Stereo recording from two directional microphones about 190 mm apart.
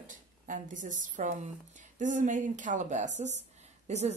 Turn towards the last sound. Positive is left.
turn(degrees=-35)  # may be behind; listen again after turning